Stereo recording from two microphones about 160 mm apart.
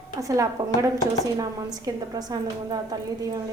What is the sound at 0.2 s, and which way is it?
A woman's voice, 20° right (ahead or behind).